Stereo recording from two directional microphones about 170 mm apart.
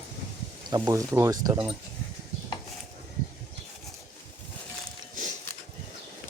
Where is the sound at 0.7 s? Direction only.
20° right (ahead or behind).